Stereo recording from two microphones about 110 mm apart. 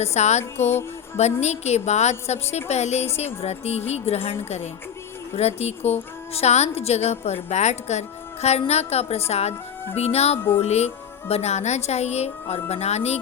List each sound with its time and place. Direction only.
0.0 s music: 85° left
1.1 s a woman's voice: 85° left
3.2 s a woman's voice: 70° left (ahead or behind)
7.5 s a woman's voice: 90° left